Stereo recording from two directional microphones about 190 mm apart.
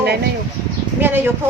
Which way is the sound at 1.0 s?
10° right (ahead or behind).